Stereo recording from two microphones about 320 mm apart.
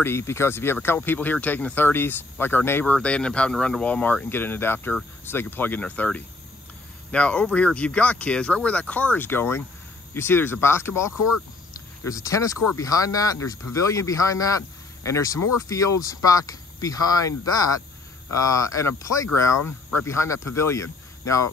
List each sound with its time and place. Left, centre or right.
0.0 s speech: centre
11.1 s speech: left
12.0 s speech: centre
19.5 s speech: left
20.1 s speech: centre